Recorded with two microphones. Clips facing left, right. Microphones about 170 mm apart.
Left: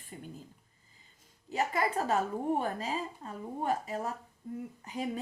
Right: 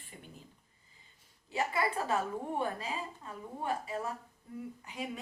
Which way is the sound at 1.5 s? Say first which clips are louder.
Left 2 dB; 40° left (ahead or behind).